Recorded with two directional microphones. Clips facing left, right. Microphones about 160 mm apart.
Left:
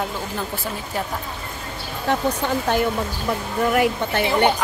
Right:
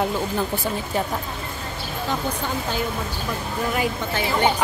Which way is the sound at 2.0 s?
65° left (ahead or behind).